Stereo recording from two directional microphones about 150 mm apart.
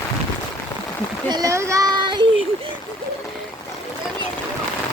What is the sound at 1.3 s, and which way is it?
Speech, 25° right (ahead or behind).